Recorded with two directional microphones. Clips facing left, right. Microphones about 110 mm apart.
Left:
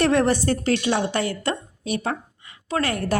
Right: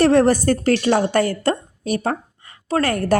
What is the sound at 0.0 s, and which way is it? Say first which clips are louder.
A woman's voice: right 5 dB; 35° right (ahead or behind).